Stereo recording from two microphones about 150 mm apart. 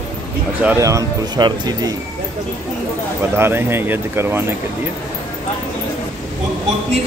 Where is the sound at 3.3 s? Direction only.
15° right (ahead or behind).